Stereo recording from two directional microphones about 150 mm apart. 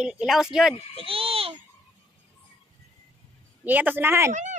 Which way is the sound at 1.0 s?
40° right (ahead or behind).